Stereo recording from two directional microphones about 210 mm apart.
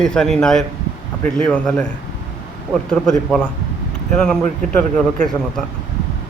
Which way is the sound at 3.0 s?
5° left (ahead or behind).